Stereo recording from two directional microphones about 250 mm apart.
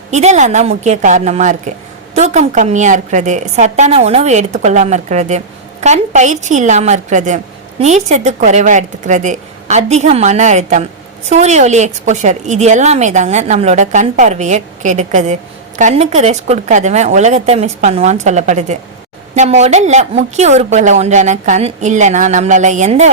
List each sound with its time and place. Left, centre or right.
0.1 s a woman's voice: right